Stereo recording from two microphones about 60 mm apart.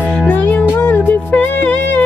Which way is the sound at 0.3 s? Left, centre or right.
Left.